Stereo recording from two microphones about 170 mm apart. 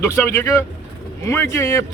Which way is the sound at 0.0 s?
15° left (ahead or behind).